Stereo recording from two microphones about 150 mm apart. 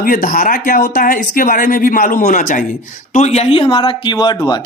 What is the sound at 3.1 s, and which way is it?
A woman's voice, 45° left (ahead or behind).